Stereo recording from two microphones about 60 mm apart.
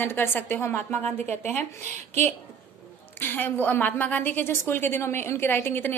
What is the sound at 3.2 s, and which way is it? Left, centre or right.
A woman's voice, left.